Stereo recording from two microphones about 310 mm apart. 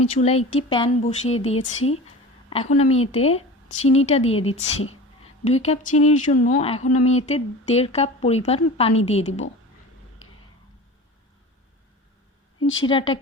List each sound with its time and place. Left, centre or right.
0.0 s a woman's voice: centre
12.5 s a sound: left
12.8 s speech: centre